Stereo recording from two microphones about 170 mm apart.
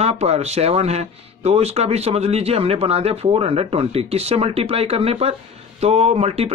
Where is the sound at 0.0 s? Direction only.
40° right (ahead or behind).